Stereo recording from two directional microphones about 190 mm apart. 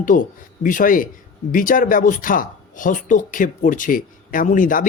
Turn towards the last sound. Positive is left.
turn(degrees=45)  # may be behind; listen again after turning